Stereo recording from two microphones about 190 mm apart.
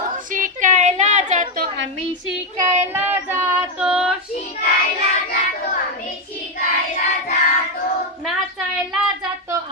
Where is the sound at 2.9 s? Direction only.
10° right (ahead or behind).